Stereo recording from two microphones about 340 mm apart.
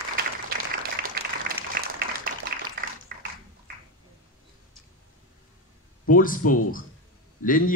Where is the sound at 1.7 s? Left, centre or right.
Right.